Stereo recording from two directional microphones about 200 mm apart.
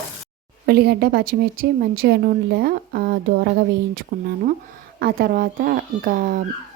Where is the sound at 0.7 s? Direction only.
50° right (ahead or behind).